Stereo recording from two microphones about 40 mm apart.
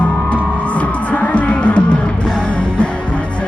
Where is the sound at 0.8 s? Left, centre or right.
Left.